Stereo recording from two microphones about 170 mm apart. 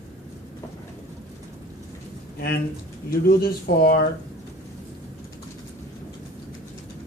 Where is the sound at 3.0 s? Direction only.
65° left (ahead or behind).